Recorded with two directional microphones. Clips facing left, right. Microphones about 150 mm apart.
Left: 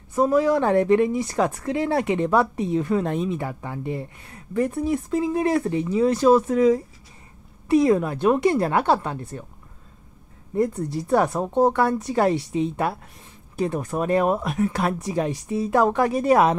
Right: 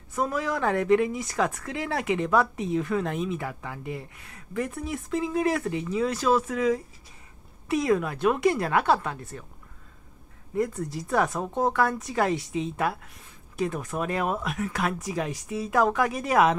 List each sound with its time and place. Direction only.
0.2 s speech: 30° left (ahead or behind)
10.5 s speech: 30° left (ahead or behind)